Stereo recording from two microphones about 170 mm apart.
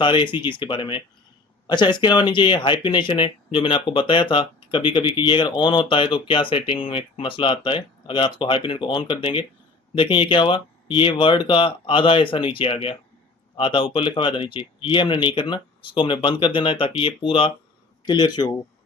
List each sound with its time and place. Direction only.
0.0 s speech: 30° left (ahead or behind)